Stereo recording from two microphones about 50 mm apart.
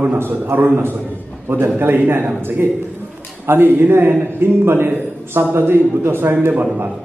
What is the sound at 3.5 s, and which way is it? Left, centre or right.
A man's voice, right.